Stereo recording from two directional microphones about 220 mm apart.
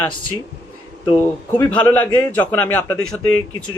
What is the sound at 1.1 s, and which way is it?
Speech, 10° left (ahead or behind).